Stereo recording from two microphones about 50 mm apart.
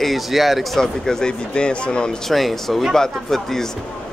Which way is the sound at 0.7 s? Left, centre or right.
Centre.